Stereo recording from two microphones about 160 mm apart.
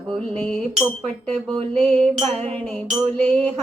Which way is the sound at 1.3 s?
40° right (ahead or behind).